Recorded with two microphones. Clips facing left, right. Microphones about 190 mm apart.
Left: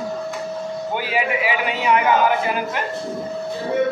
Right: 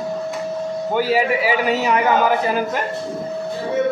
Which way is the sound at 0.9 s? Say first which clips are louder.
Right 5 dB; 40° right (ahead or behind).